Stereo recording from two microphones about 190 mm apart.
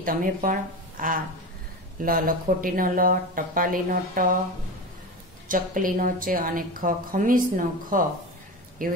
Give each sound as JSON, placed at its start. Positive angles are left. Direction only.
{"t": 0.0, "sound": "a woman's voice", "side_deg": -45}
{"t": 5.5, "sound": "a woman's voice", "side_deg": -45}